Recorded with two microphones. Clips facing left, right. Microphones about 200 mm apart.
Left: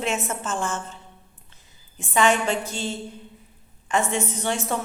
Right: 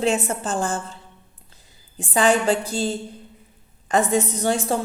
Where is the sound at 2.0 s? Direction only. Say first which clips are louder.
Right 2 dB; 35° right (ahead or behind).